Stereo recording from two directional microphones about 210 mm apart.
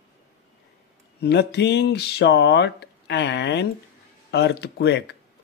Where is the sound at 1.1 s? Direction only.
50° left (ahead or behind).